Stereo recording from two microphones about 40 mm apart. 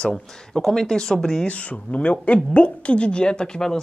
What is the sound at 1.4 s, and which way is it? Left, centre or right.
Speech, left.